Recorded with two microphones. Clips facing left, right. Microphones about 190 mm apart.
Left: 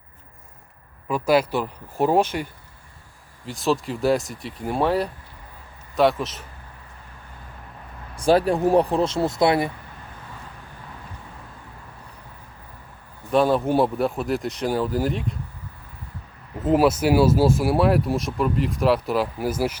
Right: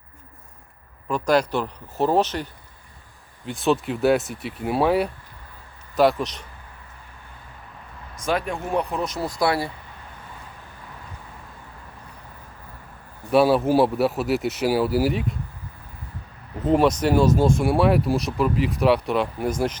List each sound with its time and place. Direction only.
1.0 s speech: 5° left (ahead or behind)
3.4 s speech: centre (ahead or behind)
8.1 s speech: 30° left (ahead or behind)
13.3 s speech: 5° right (ahead or behind)
16.6 s speech: 5° left (ahead or behind)